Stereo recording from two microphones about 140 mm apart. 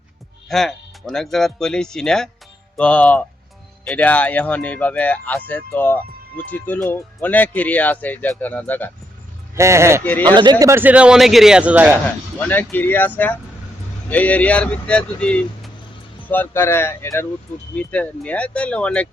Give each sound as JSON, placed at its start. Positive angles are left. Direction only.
{"t": 0.4, "sound": "speech", "side_deg": 0}
{"t": 9.6, "sound": "speech", "side_deg": -20}
{"t": 10.0, "sound": "speech", "side_deg": 10}
{"t": 10.2, "sound": "speech", "side_deg": -30}
{"t": 12.0, "sound": "speech", "side_deg": 15}